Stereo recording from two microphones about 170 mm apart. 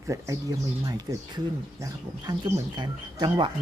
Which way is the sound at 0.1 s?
20° right (ahead or behind).